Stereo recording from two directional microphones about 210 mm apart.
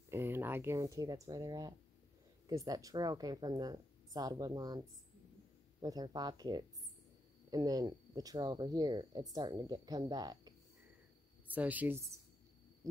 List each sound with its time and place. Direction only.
0.1 s speech: 10° right (ahead or behind)
11.4 s speech: 10° right (ahead or behind)